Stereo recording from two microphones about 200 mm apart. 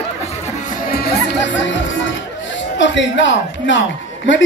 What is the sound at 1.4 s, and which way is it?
Music, 65° left (ahead or behind).